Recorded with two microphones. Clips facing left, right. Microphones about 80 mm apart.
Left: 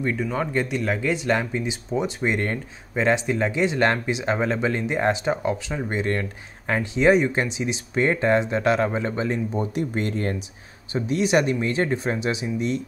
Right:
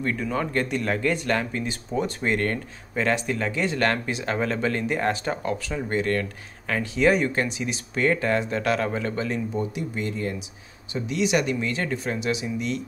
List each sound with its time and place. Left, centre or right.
0.0 s speech: centre; by 9.7 s left
9.8 s speech: left
10.9 s speech: left